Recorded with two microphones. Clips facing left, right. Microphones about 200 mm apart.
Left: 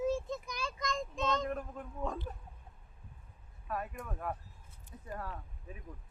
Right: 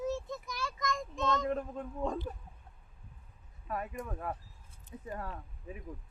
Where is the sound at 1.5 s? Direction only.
20° right (ahead or behind).